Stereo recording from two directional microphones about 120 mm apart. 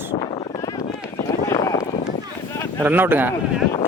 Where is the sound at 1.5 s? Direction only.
25° left (ahead or behind).